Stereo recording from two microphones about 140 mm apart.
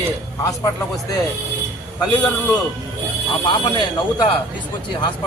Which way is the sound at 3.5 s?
35° left (ahead or behind).